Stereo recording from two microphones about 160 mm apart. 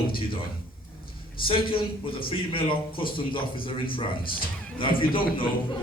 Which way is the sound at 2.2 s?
35° left (ahead or behind).